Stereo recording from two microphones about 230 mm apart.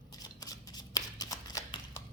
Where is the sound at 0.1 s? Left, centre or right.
Centre.